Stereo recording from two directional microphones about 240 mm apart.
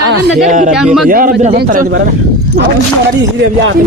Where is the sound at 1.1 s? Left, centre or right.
Right.